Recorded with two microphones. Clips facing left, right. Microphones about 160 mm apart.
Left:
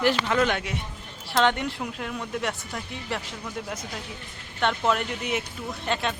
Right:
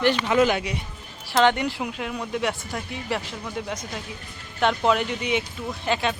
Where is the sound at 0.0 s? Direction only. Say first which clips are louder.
Right 3 dB; centre (ahead or behind).